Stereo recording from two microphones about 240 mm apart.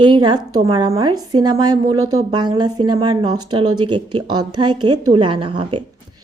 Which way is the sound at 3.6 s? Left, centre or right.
Right.